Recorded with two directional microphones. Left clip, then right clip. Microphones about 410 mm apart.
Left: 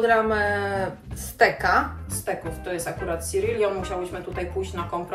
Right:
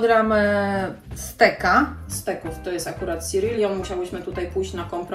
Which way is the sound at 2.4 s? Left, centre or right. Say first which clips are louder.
Right 1 dB; centre.